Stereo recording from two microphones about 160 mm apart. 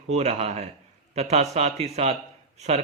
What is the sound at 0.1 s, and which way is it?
A man's voice, 45° right (ahead or behind).